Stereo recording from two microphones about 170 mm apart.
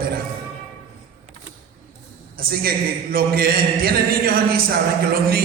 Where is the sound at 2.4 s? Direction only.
60° right (ahead or behind).